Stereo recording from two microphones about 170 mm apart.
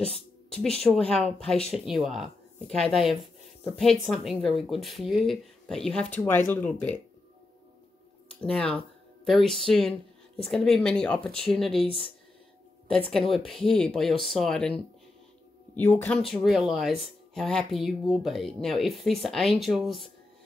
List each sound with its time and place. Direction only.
0.1 s speech: 5° left (ahead or behind)
8.4 s speech: 5° left (ahead or behind)
11.8 s speech: 35° left (ahead or behind)
13.1 s speech: centre (ahead or behind)
15.7 s speech: 10° left (ahead or behind)
16.2 s speech: centre (ahead or behind)